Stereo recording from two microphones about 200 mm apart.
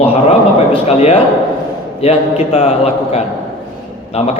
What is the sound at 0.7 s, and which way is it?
A man's voice, 30° left (ahead or behind).